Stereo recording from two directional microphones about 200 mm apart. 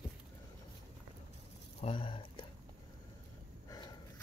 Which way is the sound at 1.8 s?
25° left (ahead or behind).